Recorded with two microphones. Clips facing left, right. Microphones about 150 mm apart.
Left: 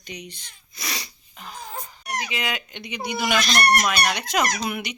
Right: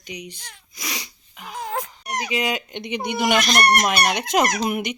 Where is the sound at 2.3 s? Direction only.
40° right (ahead or behind); by 3.4 s 55° right (ahead or behind).